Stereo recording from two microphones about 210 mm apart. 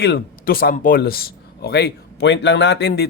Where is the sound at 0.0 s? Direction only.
50° left (ahead or behind).